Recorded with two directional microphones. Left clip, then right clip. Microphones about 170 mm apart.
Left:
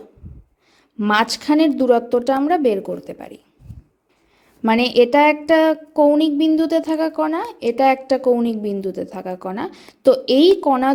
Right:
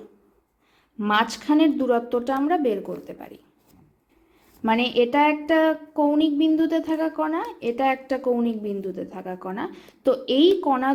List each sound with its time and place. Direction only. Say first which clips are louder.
0.9 s speech: left 4 dB; 35° left (ahead or behind)
4.6 s speech: left 6 dB; 40° left (ahead or behind)